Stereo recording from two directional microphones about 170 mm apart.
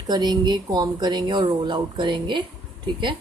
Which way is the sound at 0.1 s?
25° right (ahead or behind).